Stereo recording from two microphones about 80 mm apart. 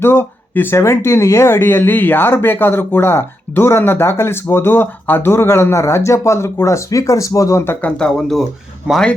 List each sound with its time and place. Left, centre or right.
0.0 s speech: left
7.6 s speech: left
7.9 s speech: centre